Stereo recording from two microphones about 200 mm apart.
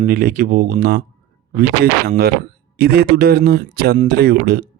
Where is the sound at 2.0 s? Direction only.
50° right (ahead or behind).